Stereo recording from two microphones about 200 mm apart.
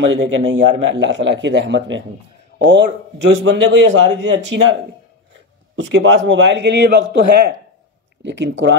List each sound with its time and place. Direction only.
0.1 s a man's voice: 70° right (ahead or behind)
3.3 s a man's voice: 65° right (ahead or behind)
5.8 s a man's voice: 70° right (ahead or behind)